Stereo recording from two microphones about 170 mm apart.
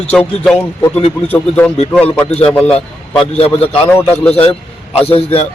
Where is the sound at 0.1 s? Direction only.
5° left (ahead or behind).